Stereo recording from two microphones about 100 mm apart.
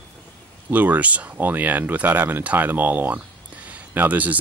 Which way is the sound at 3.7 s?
15° right (ahead or behind).